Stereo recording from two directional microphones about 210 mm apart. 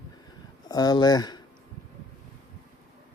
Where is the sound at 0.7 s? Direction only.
20° left (ahead or behind).